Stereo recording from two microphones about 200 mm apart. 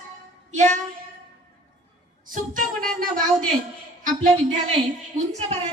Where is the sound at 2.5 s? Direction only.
45° right (ahead or behind).